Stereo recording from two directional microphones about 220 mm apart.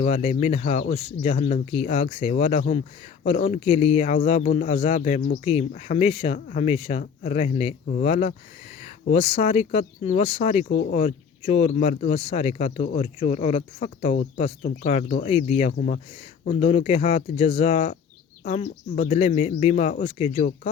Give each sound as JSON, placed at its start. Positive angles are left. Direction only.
{"t": 0.0, "sound": "speech", "side_deg": 30}